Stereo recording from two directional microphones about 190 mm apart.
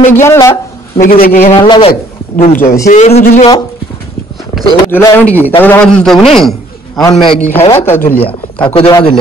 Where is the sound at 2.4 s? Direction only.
45° left (ahead or behind).